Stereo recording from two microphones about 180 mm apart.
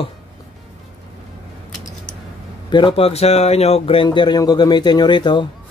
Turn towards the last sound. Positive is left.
turn(degrees=25)  # may be behind; listen again after turning